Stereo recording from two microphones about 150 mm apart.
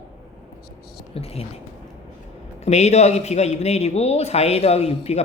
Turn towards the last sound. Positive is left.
turn(degrees=45)  # may be behind; listen again after turning